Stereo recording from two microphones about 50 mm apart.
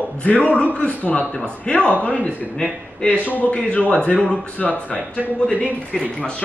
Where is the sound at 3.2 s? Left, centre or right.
Left.